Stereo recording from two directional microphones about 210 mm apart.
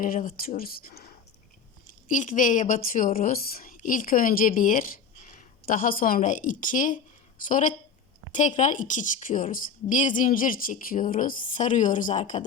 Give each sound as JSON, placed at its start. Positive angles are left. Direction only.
{"t": 0.0, "sound": "a woman's voice", "side_deg": 40}